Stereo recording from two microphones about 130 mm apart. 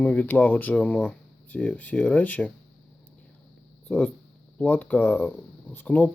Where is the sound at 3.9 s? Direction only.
10° left (ahead or behind).